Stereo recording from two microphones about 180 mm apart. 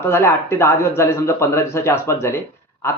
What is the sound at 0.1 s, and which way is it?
A man's voice, 15° left (ahead or behind).